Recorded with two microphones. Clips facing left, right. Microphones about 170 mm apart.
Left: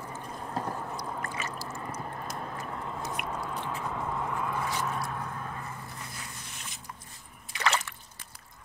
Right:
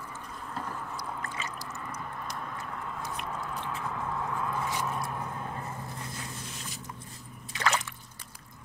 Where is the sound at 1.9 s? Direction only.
35° left (ahead or behind).